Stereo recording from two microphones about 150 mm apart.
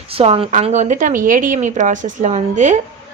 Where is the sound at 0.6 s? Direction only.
50° right (ahead or behind).